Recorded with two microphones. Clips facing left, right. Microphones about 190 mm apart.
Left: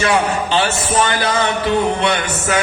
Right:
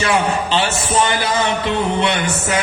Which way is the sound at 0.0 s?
25° right (ahead or behind).